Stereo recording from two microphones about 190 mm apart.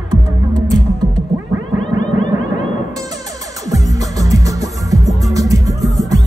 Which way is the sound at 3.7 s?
15° right (ahead or behind).